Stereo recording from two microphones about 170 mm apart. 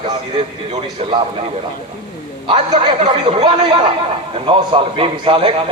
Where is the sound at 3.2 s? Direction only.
40° right (ahead or behind).